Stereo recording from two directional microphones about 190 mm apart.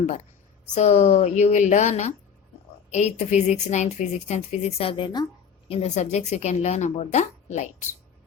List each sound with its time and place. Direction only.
0.7 s a woman's voice: 35° left (ahead or behind)